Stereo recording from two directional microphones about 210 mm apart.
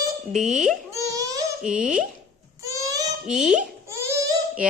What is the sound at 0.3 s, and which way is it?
Speech, 35° right (ahead or behind).